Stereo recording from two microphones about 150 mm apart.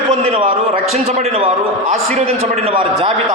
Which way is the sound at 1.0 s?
40° right (ahead or behind).